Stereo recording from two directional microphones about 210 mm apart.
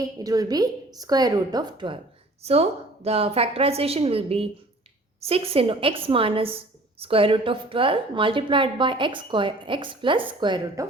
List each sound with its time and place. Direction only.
0.0 s a woman's voice: 15° right (ahead or behind)